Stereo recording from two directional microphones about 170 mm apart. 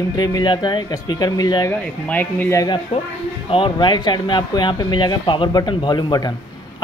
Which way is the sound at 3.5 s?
30° left (ahead or behind).